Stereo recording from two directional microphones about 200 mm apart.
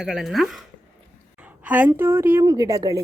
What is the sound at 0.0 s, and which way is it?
A woman's voice, centre (ahead or behind).